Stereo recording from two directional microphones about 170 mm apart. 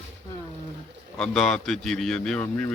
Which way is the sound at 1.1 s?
Centre (ahead or behind).